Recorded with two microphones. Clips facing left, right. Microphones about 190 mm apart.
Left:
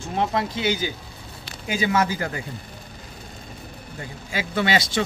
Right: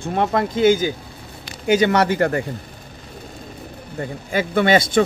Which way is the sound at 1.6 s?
70° right (ahead or behind).